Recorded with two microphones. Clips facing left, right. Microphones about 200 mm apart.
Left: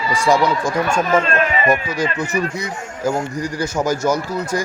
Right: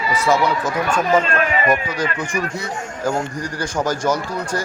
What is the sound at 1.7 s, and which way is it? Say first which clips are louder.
Speech: left 1 dB; 10° left (ahead or behind).